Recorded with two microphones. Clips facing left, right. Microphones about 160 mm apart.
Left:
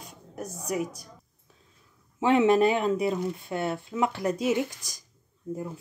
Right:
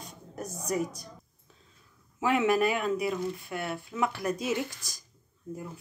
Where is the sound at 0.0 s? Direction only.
5° left (ahead or behind).